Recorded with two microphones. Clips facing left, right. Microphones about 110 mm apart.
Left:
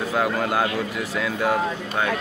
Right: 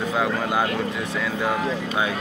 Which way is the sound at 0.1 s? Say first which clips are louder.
Left 2 dB; centre (ahead or behind).